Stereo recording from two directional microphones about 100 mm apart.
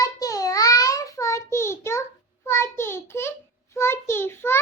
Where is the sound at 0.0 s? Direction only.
35° left (ahead or behind).